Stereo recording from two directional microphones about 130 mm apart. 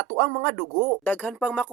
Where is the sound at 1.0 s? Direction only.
15° left (ahead or behind).